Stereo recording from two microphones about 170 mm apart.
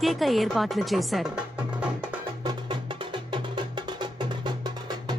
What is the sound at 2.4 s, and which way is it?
Music, 30° right (ahead or behind).